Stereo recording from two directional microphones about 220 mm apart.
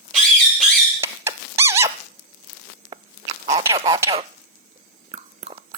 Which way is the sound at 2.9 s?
15° right (ahead or behind).